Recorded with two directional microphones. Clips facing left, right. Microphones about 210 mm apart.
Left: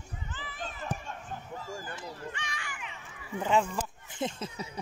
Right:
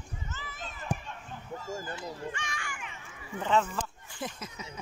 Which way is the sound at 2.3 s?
45° right (ahead or behind).